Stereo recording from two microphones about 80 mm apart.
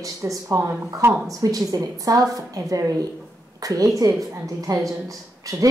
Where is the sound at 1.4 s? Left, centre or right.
Right.